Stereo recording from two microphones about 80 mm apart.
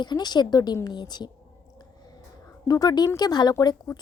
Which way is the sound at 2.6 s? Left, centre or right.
Left.